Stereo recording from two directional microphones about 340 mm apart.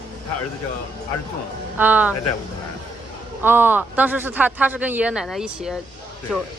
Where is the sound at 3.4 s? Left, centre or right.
Centre.